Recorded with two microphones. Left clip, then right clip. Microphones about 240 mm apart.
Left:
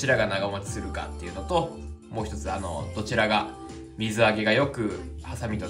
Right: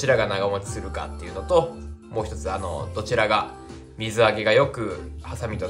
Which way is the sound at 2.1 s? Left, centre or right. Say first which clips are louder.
Right 4 dB; centre.